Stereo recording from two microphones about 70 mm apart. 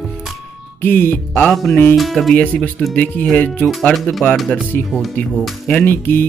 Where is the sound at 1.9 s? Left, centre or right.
Centre.